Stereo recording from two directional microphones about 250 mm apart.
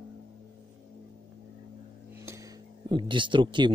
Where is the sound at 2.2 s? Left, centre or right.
Centre.